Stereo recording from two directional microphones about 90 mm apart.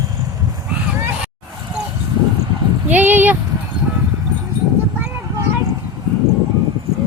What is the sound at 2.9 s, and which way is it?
Speech, 20° right (ahead or behind).